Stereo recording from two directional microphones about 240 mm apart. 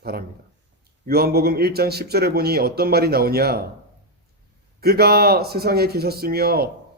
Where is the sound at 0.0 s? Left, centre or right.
Right.